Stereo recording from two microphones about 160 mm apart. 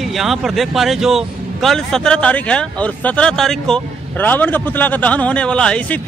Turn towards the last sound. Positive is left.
turn(degrees=5)  # may be behind; listen again after turning